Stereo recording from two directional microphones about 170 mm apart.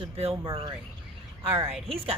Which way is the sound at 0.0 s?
35° right (ahead or behind).